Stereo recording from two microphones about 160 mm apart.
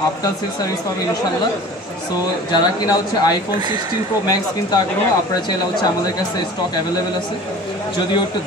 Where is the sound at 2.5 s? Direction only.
25° left (ahead or behind).